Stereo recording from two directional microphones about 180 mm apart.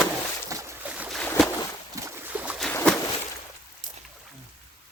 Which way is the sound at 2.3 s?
5° right (ahead or behind).